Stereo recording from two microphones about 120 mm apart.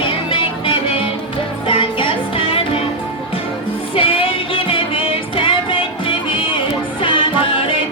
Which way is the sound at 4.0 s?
50° left (ahead or behind).